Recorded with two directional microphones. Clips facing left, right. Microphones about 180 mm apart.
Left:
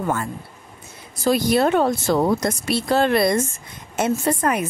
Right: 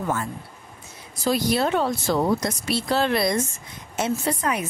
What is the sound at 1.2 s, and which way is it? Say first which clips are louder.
Speech: left 4 dB; 55° left (ahead or behind).